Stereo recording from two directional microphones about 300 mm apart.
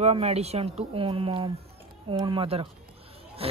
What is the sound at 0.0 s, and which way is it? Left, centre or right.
Speech, right.